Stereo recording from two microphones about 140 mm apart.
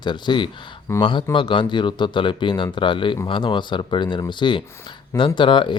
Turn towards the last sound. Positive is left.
turn(degrees=35)  # may be behind; listen again after turning